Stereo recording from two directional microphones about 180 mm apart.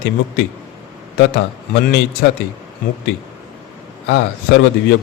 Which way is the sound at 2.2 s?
70° left (ahead or behind).